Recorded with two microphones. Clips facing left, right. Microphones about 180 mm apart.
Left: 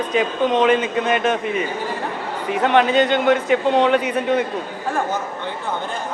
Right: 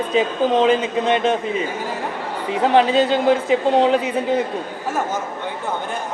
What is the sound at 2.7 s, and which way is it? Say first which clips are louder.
Speech: right 1 dB; 30° right (ahead or behind).